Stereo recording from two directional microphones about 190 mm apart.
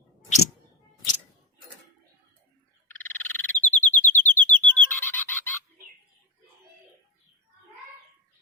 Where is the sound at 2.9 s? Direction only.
10° left (ahead or behind).